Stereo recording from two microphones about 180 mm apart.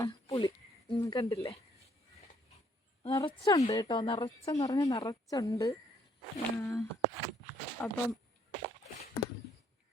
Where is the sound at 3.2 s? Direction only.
30° left (ahead or behind); by 7.9 s 10° left (ahead or behind).